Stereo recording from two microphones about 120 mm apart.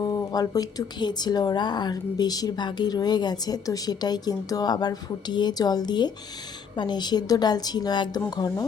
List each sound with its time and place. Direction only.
0.0 s speech: 30° left (ahead or behind)